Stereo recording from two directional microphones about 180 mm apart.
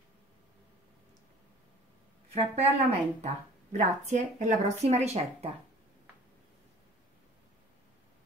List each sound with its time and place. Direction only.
2.3 s speech: 35° right (ahead or behind)